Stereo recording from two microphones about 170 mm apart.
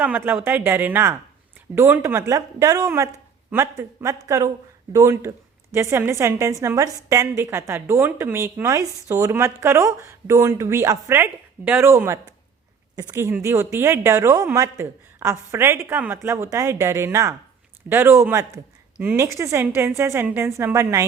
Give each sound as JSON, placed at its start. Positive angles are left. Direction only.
{"t": 0.0, "sound": "speech", "side_deg": -10}